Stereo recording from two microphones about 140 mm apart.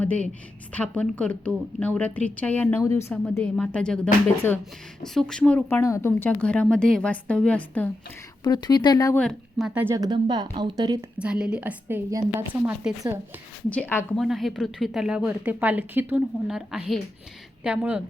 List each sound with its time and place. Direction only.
0.7 s a woman's voice: 10° left (ahead or behind)
3.3 s a woman's voice: 5° left (ahead or behind)
8.4 s speech: 30° left (ahead or behind)
9.1 s a woman's voice: 5° left (ahead or behind)
9.9 s speech: 30° right (ahead or behind)
11.2 s a woman's voice: 5° right (ahead or behind)
13.7 s a woman's voice: 10° left (ahead or behind)
14.2 s a woman's voice: centre (ahead or behind)